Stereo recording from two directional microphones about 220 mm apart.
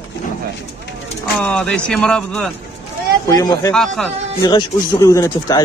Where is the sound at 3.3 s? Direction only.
15° left (ahead or behind).